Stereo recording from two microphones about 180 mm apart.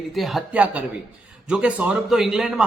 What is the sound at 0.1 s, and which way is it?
Speech, centre (ahead or behind).